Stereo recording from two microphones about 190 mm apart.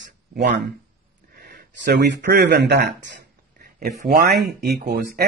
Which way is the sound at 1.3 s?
55° right (ahead or behind).